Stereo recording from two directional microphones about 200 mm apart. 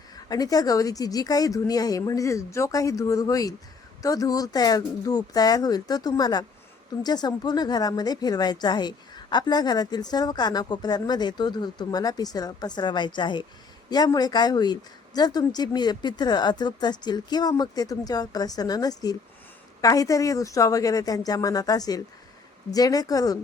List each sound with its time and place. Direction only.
0.3 s speech: 20° left (ahead or behind)